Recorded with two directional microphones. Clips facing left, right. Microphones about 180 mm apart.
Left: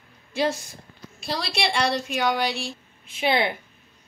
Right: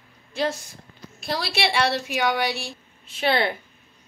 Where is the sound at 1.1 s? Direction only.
Centre (ahead or behind).